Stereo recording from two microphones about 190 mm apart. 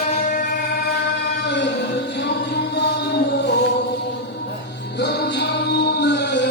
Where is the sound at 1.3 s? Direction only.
65° left (ahead or behind).